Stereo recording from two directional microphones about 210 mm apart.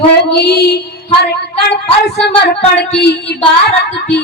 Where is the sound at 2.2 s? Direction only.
50° left (ahead or behind).